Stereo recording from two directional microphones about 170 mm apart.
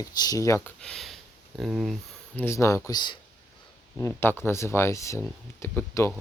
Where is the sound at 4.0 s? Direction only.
15° left (ahead or behind).